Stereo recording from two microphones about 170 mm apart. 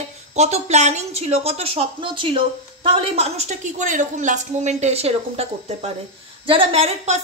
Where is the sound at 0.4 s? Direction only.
40° right (ahead or behind).